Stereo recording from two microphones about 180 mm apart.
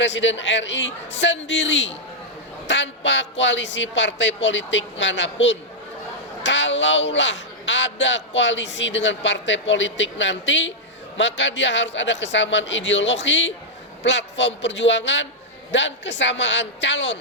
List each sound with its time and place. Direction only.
0.0 s a man's voice: 90° left